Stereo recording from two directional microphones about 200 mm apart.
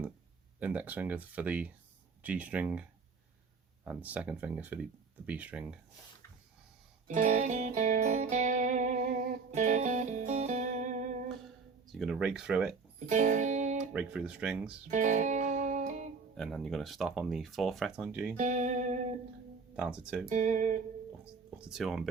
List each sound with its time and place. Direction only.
0.6 s speech: 10° right (ahead or behind)
3.8 s speech: 5° right (ahead or behind)
7.1 s music: 40° right (ahead or behind)
11.9 s speech: centre (ahead or behind)
13.1 s music: 40° right (ahead or behind)
13.9 s speech: 5° right (ahead or behind)
14.8 s music: 40° right (ahead or behind)
16.4 s speech: centre (ahead or behind)
18.3 s speech: 40° right (ahead or behind)
19.7 s speech: 5° right (ahead or behind)
20.3 s music: 40° right (ahead or behind)
21.6 s speech: centre (ahead or behind)